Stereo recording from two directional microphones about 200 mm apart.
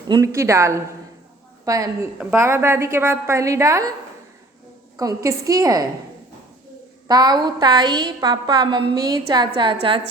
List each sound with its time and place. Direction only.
0.1 s a woman's voice: 15° right (ahead or behind)
4.9 s a woman's voice: 15° right (ahead or behind)
7.1 s a woman's voice: 20° right (ahead or behind)